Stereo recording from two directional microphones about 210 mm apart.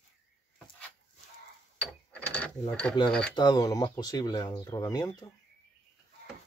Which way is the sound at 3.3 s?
20° left (ahead or behind).